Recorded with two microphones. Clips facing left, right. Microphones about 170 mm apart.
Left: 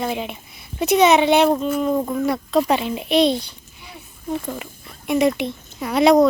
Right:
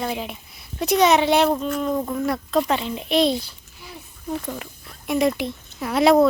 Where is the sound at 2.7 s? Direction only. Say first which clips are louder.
Left 3 dB; 15° left (ahead or behind).